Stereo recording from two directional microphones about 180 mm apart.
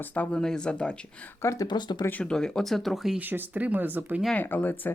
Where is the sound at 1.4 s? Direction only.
20° left (ahead or behind).